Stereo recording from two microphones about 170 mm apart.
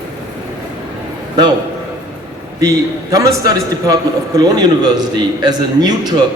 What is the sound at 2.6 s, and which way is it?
A man's voice, 20° right (ahead or behind).